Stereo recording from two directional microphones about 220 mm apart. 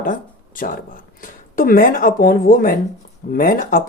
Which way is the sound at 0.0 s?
40° left (ahead or behind).